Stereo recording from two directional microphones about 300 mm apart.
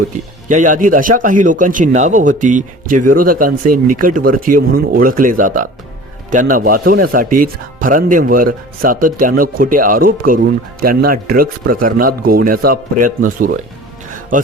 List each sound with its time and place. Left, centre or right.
0.4 s speech: right